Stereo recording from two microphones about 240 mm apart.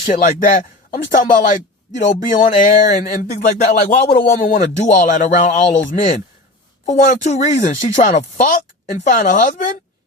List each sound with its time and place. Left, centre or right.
0.0 s speech: left